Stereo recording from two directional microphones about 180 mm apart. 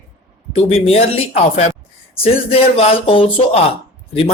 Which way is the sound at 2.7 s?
30° left (ahead or behind).